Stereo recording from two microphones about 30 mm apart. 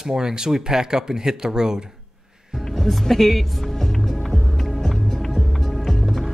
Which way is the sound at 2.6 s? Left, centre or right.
Centre.